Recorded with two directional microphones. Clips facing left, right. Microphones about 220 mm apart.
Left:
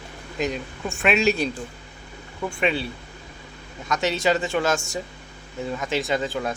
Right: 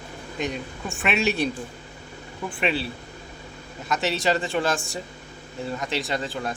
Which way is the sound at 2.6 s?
Centre (ahead or behind).